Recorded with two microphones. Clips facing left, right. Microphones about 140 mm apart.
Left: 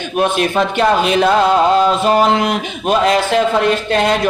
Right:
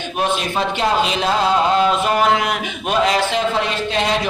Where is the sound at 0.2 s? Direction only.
55° left (ahead or behind).